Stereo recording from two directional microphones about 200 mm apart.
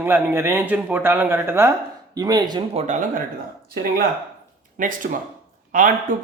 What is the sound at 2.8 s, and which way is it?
Speech, 40° right (ahead or behind).